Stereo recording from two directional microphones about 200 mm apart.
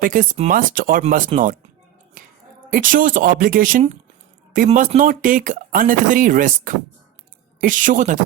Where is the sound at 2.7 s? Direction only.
40° right (ahead or behind).